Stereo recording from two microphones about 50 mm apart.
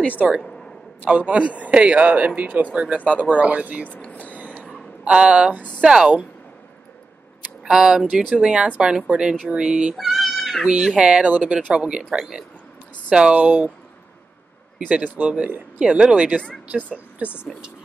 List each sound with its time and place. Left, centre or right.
0.5 s a sound: centre
1.0 s a man's voice: right
3.8 s speech: left
4.3 s a sound: right
5.0 s a man's voice: centre
7.6 s a man's voice: centre
9.9 s cat: centre
10.6 s speech: centre
11.2 s a man's voice: right; by 12.4 s centre
13.3 s speech: right
14.8 s speech: right
15.8 s a man's voice: centre